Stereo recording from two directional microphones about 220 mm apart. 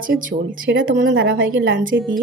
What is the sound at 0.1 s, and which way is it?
Speech, 60° right (ahead or behind).